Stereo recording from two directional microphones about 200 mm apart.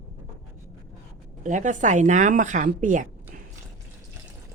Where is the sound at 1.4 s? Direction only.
40° right (ahead or behind).